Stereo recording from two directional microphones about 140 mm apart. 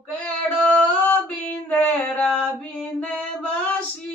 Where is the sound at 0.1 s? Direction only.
10° left (ahead or behind).